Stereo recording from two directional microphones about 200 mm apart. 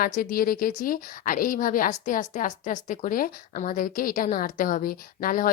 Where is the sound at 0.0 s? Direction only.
45° left (ahead or behind).